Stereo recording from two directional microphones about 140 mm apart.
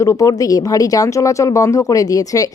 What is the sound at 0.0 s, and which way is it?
Speech, 25° left (ahead or behind).